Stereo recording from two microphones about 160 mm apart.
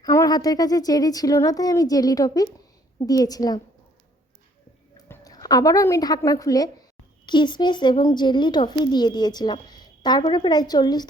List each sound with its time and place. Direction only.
0.0 s a woman's voice: 20° left (ahead or behind)
4.9 s a woman's voice: 20° left (ahead or behind)